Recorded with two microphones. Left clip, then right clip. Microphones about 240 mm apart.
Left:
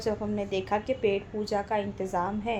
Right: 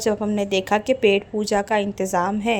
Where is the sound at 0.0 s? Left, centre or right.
Right.